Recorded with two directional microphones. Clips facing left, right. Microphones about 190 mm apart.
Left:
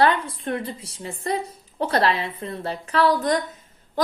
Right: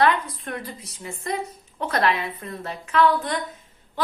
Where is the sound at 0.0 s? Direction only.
30° left (ahead or behind).